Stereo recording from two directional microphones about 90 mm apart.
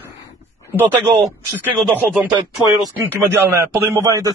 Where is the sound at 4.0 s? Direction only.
40° right (ahead or behind).